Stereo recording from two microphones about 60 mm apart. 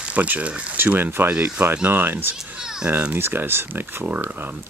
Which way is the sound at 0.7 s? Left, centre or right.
Right.